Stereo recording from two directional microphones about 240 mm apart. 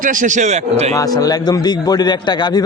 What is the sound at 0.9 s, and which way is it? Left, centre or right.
A man's voice, centre.